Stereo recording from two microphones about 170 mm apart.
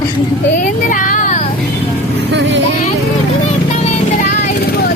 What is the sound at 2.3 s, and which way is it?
Speech, 90° right.